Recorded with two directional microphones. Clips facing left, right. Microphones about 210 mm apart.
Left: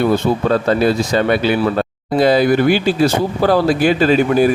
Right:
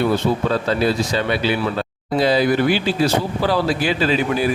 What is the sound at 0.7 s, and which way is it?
A man's voice, 50° left (ahead or behind).